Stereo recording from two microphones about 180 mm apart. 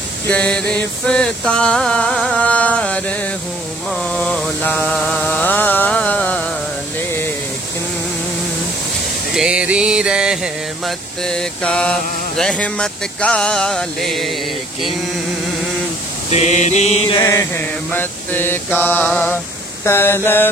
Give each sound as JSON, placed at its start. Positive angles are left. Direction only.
{"t": 0.3, "sound": "mantra", "side_deg": 5}
{"t": 9.3, "sound": "music", "side_deg": -5}
{"t": 11.2, "sound": "mantra", "side_deg": 5}
{"t": 16.3, "sound": "mantra", "side_deg": 40}
{"t": 17.2, "sound": "mantra", "side_deg": 15}